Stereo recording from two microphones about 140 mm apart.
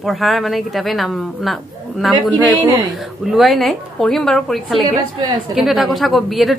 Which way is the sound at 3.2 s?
Centre (ahead or behind).